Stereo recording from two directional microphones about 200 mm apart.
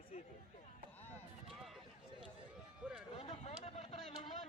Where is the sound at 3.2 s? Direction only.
30° left (ahead or behind).